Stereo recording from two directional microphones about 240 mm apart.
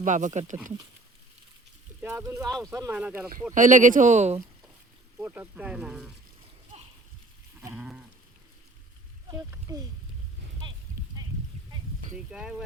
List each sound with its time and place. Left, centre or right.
0.0 s speech: right
2.0 s speech: centre
2.5 s speech: centre
3.5 s speech: right
5.2 s speech: centre
7.6 s speech: centre
12.1 s speech: centre